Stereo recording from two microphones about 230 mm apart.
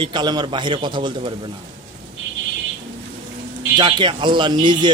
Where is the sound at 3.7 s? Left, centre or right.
Right.